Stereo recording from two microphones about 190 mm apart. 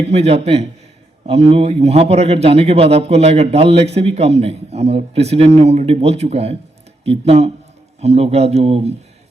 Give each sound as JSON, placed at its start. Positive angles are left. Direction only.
{"t": 0.0, "sound": "speech", "side_deg": -35}